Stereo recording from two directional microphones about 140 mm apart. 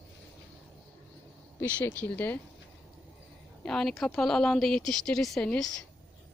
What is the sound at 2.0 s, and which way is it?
Speech, 10° left (ahead or behind).